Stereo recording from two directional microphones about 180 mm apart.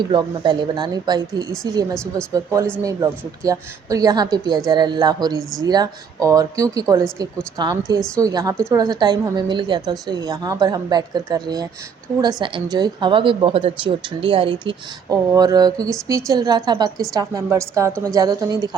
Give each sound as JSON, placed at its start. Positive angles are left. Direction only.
{"t": 0.1, "sound": "speech", "side_deg": -25}